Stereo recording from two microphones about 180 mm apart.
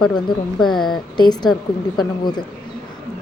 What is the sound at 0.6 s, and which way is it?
Speech, centre (ahead or behind).